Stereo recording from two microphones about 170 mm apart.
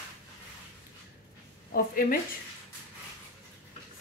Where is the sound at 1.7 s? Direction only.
55° left (ahead or behind).